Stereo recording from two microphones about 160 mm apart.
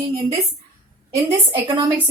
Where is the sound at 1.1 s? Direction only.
30° right (ahead or behind).